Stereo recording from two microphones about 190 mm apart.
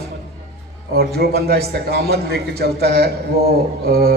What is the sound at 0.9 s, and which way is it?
A man's voice, 55° right (ahead or behind).